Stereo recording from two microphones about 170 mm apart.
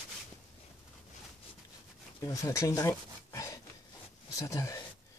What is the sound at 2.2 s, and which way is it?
Dog, 20° left (ahead or behind).